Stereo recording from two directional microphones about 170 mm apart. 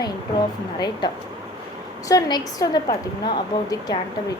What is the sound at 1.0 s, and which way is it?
A woman's voice, 25° left (ahead or behind).